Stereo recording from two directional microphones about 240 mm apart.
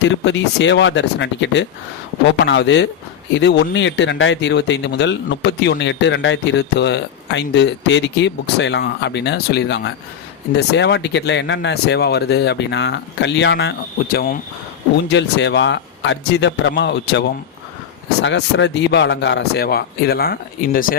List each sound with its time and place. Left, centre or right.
0.3 s speech: left